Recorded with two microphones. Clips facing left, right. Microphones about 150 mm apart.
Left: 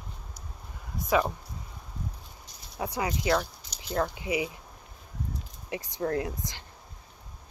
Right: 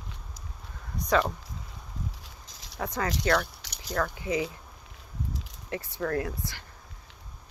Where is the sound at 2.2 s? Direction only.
90° right.